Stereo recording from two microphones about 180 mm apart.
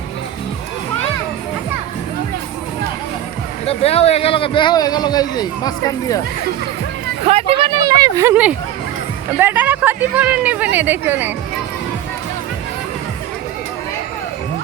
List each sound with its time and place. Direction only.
3.7 s a man's voice: 35° left (ahead or behind)
7.3 s speech: 35° right (ahead or behind); by 11.3 s 10° right (ahead or behind)